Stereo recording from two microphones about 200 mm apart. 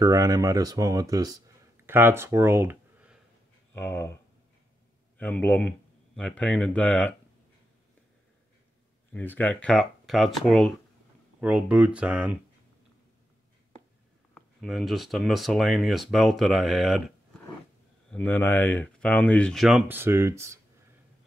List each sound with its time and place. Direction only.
0.0 s speech: 15° right (ahead or behind)
3.7 s speech: 10° left (ahead or behind)
5.1 s speech: 10° left (ahead or behind)
9.1 s speech: 10° left (ahead or behind)
14.3 s speech: centre (ahead or behind)
18.1 s speech: 10° left (ahead or behind); by 20.5 s 15° right (ahead or behind)